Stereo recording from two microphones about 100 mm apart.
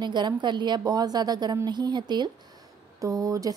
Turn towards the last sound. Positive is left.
turn(degrees=-35)  # may be behind; listen again after turning